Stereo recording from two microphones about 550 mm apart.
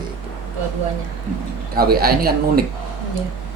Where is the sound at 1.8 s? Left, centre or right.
Centre.